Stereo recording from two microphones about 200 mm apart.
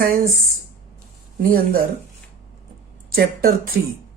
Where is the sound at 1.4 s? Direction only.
45° right (ahead or behind).